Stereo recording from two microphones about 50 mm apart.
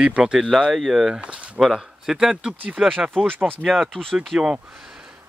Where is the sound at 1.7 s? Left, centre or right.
Centre.